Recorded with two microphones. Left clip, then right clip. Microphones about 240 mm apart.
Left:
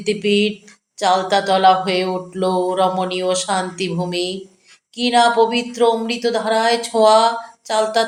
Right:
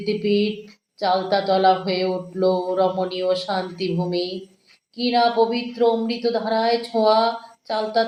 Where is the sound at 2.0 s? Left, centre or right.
Left.